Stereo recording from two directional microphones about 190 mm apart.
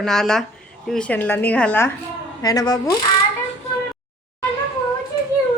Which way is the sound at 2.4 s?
20° left (ahead or behind).